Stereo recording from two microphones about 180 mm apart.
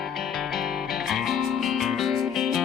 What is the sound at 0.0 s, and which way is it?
Music, centre (ahead or behind).